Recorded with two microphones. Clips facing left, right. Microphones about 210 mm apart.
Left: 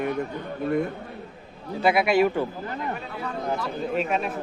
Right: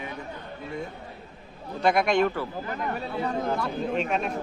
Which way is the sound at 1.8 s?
5° left (ahead or behind).